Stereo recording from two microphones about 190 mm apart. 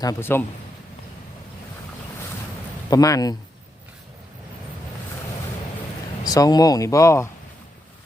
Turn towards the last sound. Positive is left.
turn(degrees=15)  # may be behind; listen again after turning